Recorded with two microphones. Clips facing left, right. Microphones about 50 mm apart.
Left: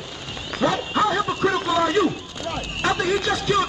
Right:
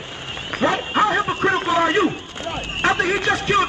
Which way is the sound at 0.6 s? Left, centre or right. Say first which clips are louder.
Right 2 dB; right.